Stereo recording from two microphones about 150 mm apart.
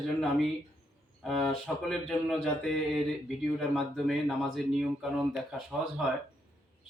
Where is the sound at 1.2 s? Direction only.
5° left (ahead or behind).